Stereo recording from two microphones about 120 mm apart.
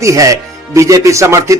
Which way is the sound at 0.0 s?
25° right (ahead or behind).